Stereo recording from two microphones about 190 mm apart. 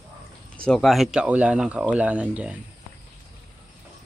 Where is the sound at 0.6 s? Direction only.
Centre (ahead or behind).